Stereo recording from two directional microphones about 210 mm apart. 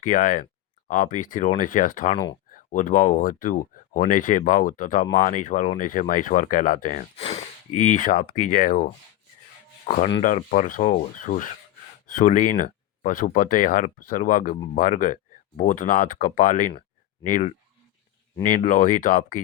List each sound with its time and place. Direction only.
0.0 s speech: 40° left (ahead or behind)
10.2 s speech: 35° left (ahead or behind)